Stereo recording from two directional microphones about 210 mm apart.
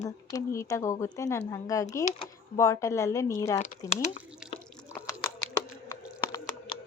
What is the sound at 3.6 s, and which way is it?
Speech, 30° left (ahead or behind).